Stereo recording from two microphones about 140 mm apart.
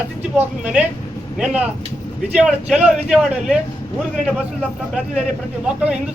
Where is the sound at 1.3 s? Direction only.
10° right (ahead or behind).